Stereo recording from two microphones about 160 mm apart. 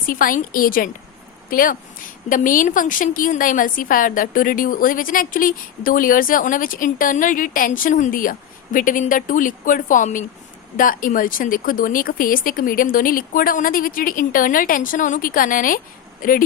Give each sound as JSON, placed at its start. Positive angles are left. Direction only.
{"t": 0.0, "sound": "a woman's voice", "side_deg": 60}